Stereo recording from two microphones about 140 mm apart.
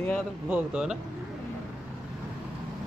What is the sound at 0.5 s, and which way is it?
Speech, 5° right (ahead or behind).